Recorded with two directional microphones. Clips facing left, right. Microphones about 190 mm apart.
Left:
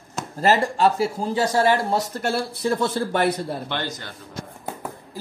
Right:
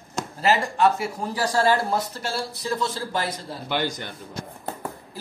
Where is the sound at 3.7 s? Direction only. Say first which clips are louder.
Right 3 dB; 15° right (ahead or behind).